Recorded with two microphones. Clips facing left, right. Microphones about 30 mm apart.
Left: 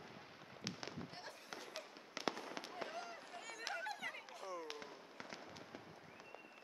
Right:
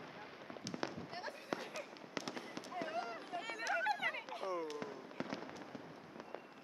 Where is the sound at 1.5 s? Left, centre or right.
Centre.